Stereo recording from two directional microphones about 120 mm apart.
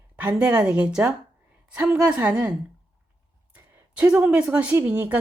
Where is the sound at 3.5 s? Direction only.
10° right (ahead or behind).